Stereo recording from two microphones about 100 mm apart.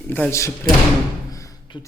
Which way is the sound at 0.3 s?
30° left (ahead or behind).